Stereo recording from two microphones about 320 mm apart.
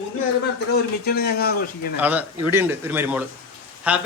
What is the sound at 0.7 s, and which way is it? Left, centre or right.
Speech, left.